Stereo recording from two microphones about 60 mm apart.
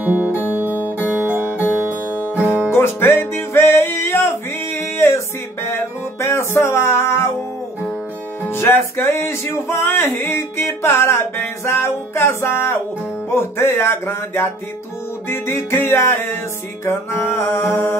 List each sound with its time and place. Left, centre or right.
0.0 s music: right
2.7 s music: left
8.5 s music: left